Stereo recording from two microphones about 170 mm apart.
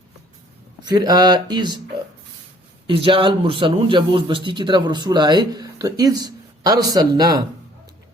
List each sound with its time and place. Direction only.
0.8 s speech: 25° right (ahead or behind)
2.8 s speech: 30° right (ahead or behind)